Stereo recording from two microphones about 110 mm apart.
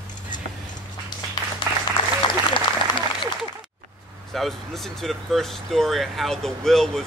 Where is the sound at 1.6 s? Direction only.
40° left (ahead or behind).